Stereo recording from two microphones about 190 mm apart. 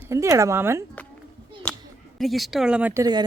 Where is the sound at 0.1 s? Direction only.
15° right (ahead or behind).